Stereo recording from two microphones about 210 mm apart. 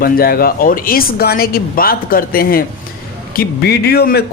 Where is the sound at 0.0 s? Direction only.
45° left (ahead or behind).